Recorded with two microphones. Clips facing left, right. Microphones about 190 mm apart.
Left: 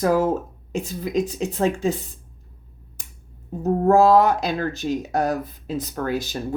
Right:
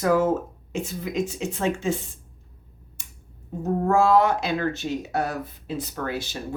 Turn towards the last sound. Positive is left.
turn(degrees=40)  # may be behind; listen again after turning